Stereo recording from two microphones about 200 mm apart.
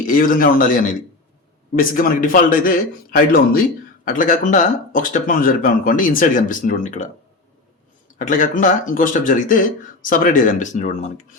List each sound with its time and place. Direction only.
0.0 s speech: 45° left (ahead or behind)
8.3 s speech: 40° left (ahead or behind)